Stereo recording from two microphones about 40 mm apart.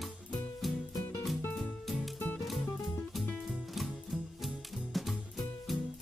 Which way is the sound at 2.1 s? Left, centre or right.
Left.